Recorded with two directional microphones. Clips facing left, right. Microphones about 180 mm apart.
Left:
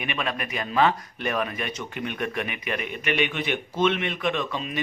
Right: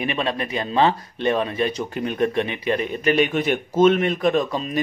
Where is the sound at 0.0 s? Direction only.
30° right (ahead or behind).